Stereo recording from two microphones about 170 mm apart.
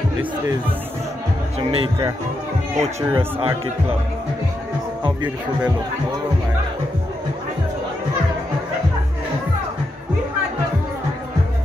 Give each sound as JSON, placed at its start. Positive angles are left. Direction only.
{"t": 1.6, "sound": "speech", "side_deg": -30}